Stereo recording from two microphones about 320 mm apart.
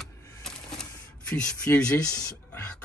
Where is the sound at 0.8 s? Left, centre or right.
Centre.